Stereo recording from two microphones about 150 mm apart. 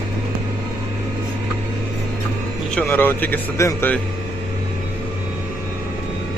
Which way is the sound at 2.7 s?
10° left (ahead or behind).